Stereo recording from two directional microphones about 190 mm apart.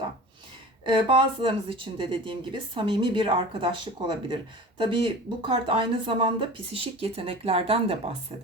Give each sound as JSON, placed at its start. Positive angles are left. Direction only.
{"t": 0.9, "sound": "speech", "side_deg": -25}